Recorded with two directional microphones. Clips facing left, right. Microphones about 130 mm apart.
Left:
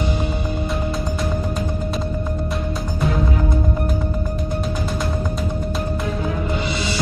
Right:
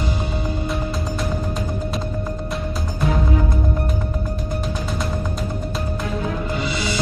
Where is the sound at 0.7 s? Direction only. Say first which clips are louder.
Left 1 dB; centre (ahead or behind).